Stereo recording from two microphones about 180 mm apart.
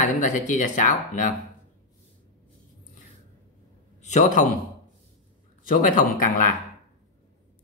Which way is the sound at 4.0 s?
40° left (ahead or behind).